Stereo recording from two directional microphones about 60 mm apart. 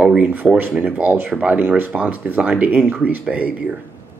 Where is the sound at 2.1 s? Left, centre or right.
Right.